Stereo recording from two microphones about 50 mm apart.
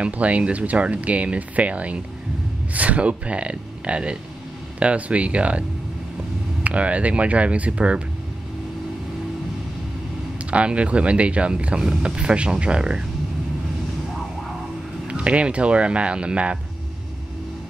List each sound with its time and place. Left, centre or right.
0.0 s speech: right
10.5 s speech: right
15.0 s speech: right